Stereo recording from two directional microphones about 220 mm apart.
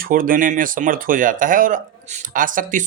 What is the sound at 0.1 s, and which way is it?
Speech, 40° right (ahead or behind).